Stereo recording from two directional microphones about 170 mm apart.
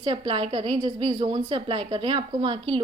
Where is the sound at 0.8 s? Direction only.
25° right (ahead or behind).